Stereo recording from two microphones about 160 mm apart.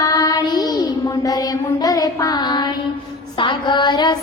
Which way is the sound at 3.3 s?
30° left (ahead or behind).